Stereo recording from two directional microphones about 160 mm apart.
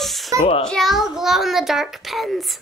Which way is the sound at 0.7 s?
Centre (ahead or behind).